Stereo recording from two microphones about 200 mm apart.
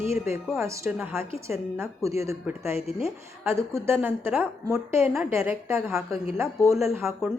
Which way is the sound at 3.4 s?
15° right (ahead or behind).